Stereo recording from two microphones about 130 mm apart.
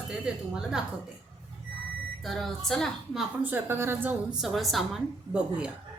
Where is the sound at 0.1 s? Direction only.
5° right (ahead or behind).